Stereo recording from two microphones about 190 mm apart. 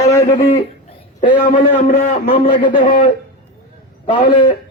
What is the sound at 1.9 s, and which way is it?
Speech, 35° left (ahead or behind).